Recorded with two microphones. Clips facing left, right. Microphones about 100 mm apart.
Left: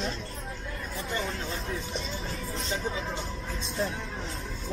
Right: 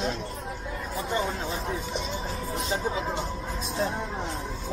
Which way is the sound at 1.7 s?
5° right (ahead or behind).